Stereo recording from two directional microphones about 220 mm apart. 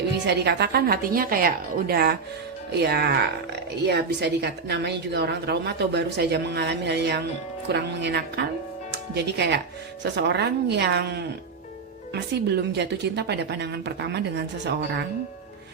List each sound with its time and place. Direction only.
0.3 s a woman's voice: 50° right (ahead or behind)